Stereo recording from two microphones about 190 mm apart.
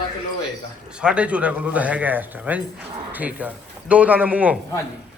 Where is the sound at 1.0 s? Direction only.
5° right (ahead or behind).